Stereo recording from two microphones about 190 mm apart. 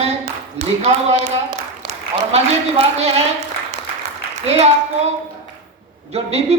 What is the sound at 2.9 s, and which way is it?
Speech, 35° right (ahead or behind).